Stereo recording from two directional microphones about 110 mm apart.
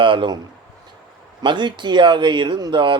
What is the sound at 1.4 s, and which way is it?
Speech, 45° right (ahead or behind).